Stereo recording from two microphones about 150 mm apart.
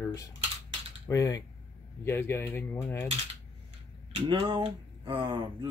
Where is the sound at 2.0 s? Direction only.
15° left (ahead or behind).